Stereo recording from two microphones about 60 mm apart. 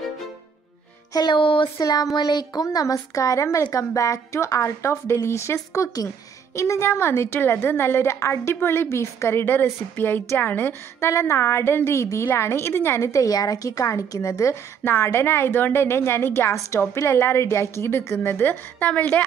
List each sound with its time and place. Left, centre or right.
1.1 s speech: left
1.8 s a sound: left
2.6 s a woman's voice: left
9.4 s a woman's voice: left
11.0 s a woman's voice: left
13.0 s a woman's voice: left